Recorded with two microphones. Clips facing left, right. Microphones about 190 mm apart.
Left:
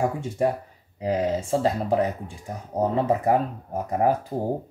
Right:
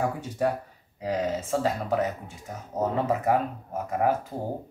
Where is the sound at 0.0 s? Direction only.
25° left (ahead or behind).